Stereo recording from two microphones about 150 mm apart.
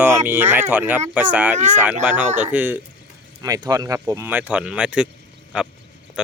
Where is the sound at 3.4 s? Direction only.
25° right (ahead or behind).